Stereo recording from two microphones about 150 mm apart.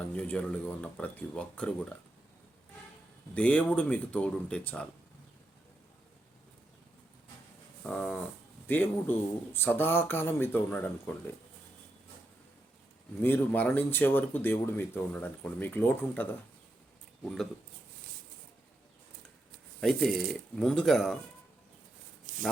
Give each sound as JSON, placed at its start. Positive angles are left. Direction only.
{"t": 0.0, "sound": "speech", "side_deg": 10}
{"t": 3.3, "sound": "speech", "side_deg": 10}
{"t": 7.9, "sound": "speech", "side_deg": 5}
{"t": 13.2, "sound": "speech", "side_deg": 10}
{"t": 19.8, "sound": "speech", "side_deg": 0}
{"t": 22.3, "sound": "a sound", "side_deg": -60}